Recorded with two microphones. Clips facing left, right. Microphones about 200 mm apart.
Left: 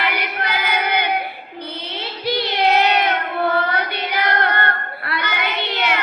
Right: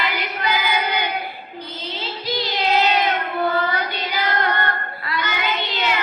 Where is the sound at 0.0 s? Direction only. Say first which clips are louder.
Left 1 dB; 60° left (ahead or behind).